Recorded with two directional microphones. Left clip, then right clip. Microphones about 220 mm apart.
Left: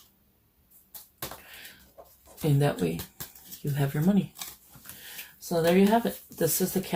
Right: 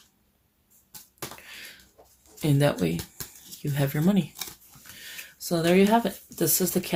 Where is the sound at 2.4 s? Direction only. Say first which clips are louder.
Right 3 dB; 50° right (ahead or behind).